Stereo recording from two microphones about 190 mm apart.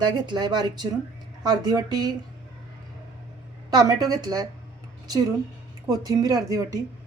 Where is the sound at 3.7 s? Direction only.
20° right (ahead or behind).